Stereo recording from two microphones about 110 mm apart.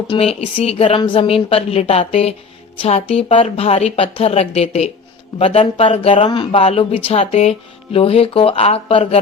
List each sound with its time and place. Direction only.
0.1 s speech: 65° left (ahead or behind)
5.4 s speech: 60° left (ahead or behind)
7.9 s speech: 60° left (ahead or behind)